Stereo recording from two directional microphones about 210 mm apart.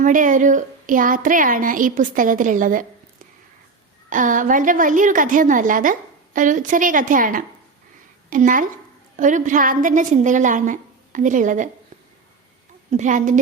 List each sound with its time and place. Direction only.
0.0 s a woman's voice: 40° right (ahead or behind)
4.1 s a woman's voice: 40° right (ahead or behind)
12.9 s a woman's voice: 35° right (ahead or behind)